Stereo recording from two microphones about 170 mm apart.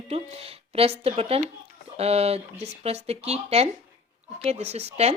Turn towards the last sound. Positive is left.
turn(degrees=-40)  # may be behind; listen again after turning